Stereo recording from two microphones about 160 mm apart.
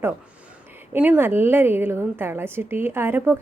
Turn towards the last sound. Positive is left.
turn(degrees=-10)  # may be behind; listen again after turning